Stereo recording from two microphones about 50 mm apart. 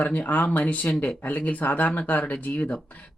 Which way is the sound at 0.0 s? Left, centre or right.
Left.